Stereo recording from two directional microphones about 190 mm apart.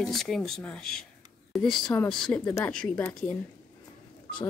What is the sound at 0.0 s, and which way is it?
Speech, centre (ahead or behind).